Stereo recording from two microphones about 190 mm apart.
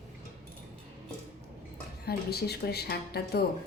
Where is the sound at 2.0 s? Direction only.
55° left (ahead or behind).